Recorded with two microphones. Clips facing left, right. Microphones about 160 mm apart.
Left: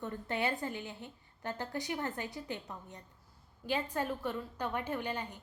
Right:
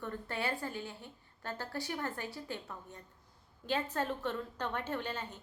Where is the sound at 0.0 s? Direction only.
20° left (ahead or behind).